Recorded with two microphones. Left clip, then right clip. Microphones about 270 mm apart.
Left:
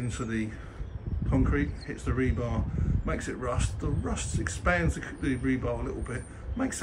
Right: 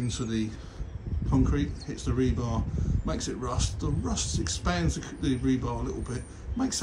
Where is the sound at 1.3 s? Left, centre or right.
Centre.